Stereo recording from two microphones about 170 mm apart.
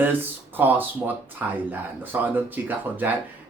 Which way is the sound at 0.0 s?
10° right (ahead or behind).